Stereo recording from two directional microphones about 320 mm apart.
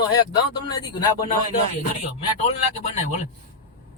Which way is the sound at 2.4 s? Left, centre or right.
Left.